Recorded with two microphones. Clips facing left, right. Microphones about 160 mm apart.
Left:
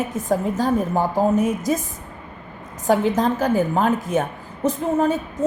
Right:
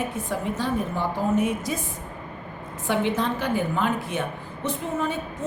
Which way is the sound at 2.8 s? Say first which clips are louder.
Left 6 dB; 40° left (ahead or behind).